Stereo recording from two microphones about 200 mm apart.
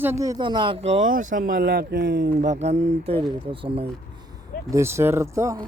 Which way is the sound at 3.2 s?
25° right (ahead or behind).